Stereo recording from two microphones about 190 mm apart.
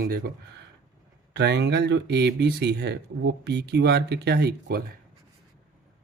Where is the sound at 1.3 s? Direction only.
65° right (ahead or behind).